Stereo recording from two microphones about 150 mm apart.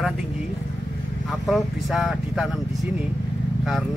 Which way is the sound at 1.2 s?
Centre (ahead or behind).